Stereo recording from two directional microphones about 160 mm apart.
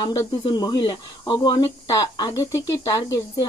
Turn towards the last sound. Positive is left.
turn(degrees=20)  # may be behind; listen again after turning